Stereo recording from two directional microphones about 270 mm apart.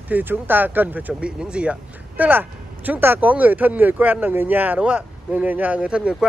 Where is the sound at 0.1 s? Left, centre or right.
Centre.